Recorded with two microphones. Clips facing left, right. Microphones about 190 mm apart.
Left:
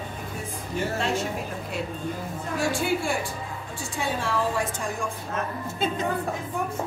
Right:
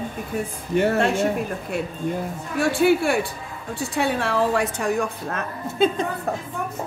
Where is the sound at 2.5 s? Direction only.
65° right (ahead or behind).